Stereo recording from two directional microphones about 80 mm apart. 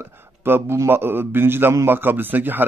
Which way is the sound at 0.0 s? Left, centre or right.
Right.